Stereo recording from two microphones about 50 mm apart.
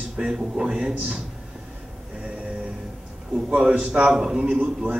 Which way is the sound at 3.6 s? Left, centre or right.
Right.